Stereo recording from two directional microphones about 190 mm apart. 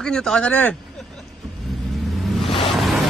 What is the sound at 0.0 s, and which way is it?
Speech, 5° left (ahead or behind).